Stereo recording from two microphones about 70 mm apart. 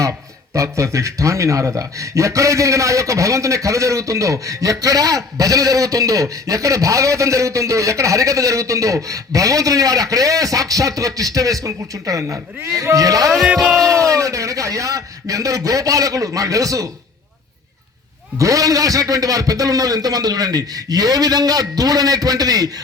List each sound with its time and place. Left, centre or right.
0.5 s a man's voice: right
18.3 s a man's voice: right